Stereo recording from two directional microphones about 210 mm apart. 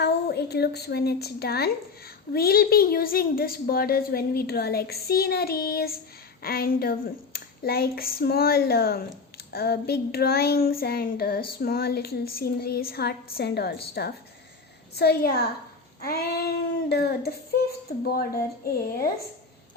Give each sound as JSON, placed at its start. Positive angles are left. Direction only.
{"t": 0.0, "sound": "a woman's voice", "side_deg": 50}